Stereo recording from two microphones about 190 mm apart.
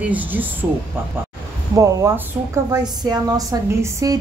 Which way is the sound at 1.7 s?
15° right (ahead or behind).